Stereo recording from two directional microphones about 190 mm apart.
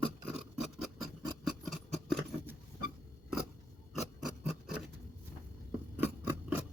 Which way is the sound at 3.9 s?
Centre (ahead or behind).